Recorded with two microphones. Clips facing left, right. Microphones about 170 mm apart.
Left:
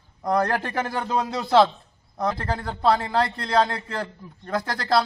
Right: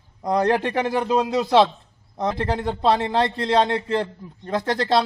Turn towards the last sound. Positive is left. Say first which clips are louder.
# right 2 dB
turn(degrees=-20)  # may be behind; listen again after turning